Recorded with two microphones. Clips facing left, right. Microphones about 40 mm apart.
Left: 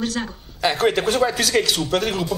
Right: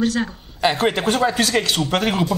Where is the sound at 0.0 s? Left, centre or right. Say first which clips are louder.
Right 5 dB; centre.